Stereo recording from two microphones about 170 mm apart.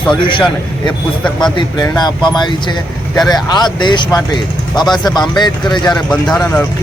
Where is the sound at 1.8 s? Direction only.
25° left (ahead or behind).